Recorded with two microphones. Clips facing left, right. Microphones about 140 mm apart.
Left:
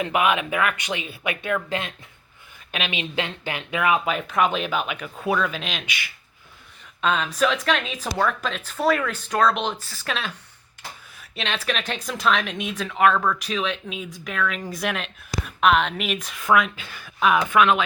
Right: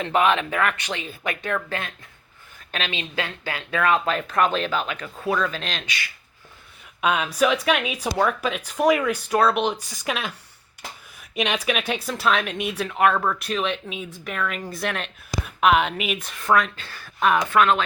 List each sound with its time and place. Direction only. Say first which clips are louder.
0.0 s speech: right 1 dB; 10° left (ahead or behind)
1.0 s speech: even; 40° right (ahead or behind)
1.5 s speech: left 3 dB; 15° left (ahead or behind)
7.0 s a woman's voice: right 1 dB; 10° right (ahead or behind); by 17.8 s 15° left (ahead or behind)